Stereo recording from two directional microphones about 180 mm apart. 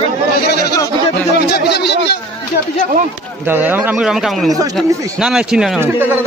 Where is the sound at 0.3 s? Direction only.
65° left (ahead or behind).